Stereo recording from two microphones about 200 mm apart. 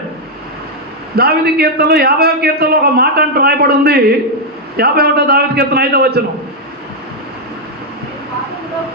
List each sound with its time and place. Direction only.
1.1 s a man's voice: 50° right (ahead or behind)